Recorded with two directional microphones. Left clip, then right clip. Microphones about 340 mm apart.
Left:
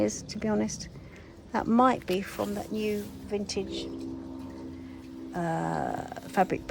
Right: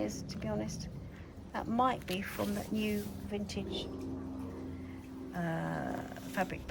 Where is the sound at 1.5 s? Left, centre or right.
Centre.